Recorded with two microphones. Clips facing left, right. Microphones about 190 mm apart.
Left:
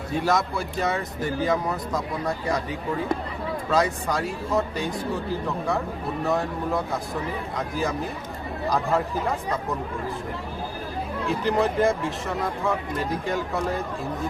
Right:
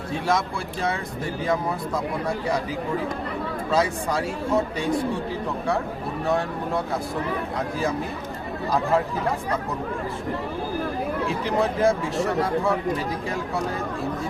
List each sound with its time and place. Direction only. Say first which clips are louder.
0.3 s speech: even; centre (ahead or behind)
3.7 s speech: even; centre (ahead or behind)
11.3 s speech: left 4 dB; centre (ahead or behind)